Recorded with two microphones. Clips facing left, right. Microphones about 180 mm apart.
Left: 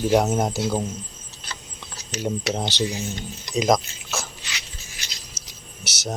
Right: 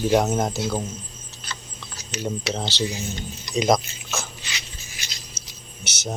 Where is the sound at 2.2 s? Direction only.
15° left (ahead or behind).